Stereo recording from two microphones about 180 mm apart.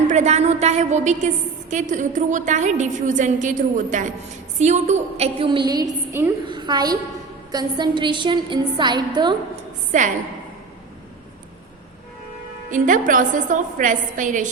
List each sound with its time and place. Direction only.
0.1 s a woman's voice: 40° right (ahead or behind); by 9.4 s 25° right (ahead or behind)
12.7 s a woman's voice: 45° right (ahead or behind)